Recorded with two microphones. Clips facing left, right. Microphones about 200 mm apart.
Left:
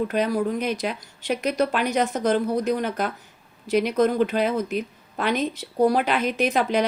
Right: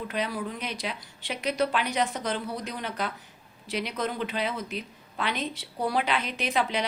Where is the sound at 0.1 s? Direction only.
45° left (ahead or behind).